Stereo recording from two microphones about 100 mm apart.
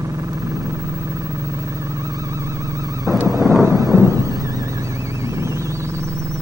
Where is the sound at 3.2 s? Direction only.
35° right (ahead or behind).